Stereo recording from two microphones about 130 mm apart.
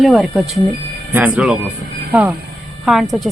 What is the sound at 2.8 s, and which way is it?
Speech, centre (ahead or behind).